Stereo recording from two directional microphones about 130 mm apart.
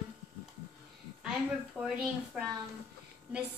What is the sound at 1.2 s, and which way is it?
A woman's voice, 5° right (ahead or behind).